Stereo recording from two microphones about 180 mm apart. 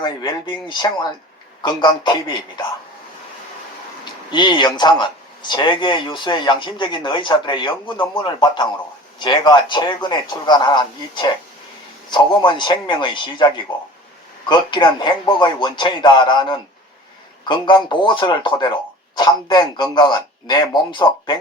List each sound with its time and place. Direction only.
0.0 s speech: 25° left (ahead or behind)
4.3 s speech: 25° left (ahead or behind)